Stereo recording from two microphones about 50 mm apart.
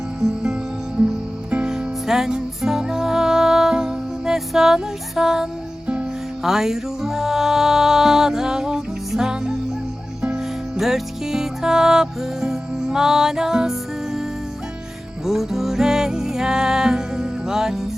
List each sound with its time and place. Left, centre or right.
1.5 s music: right
1.7 s music: centre
10.8 s music: centre